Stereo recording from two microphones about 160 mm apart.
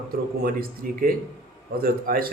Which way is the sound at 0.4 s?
70° right (ahead or behind).